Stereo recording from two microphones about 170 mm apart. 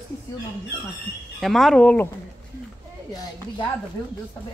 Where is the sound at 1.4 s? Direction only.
Centre (ahead or behind).